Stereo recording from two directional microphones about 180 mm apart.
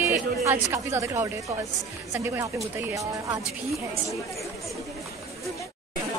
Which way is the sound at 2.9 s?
20° right (ahead or behind).